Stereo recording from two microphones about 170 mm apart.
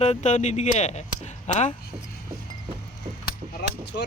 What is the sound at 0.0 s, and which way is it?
Speech, 40° left (ahead or behind).